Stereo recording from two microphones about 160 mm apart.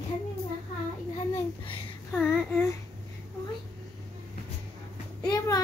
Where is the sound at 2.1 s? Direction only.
10° left (ahead or behind).